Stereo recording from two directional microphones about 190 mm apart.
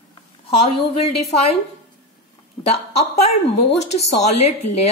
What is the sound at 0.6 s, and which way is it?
Speech, 30° left (ahead or behind).